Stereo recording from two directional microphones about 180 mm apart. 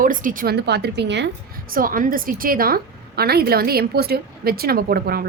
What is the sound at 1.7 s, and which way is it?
A woman's voice, 50° right (ahead or behind).